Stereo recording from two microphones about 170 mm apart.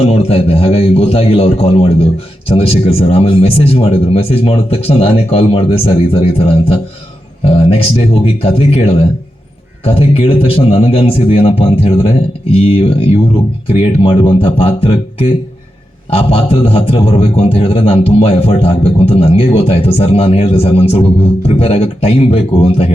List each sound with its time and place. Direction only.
0.1 s a man's voice: 35° left (ahead or behind)
16.1 s a man's voice: 35° left (ahead or behind)